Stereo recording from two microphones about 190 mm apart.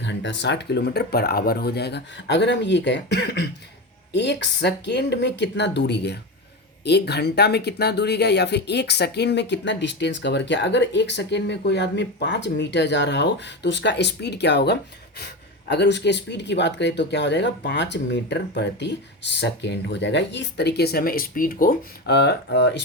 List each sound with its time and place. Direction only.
0.0 s speech: 70° left (ahead or behind)